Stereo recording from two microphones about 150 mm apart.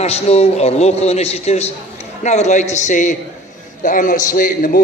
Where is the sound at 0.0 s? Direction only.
45° left (ahead or behind).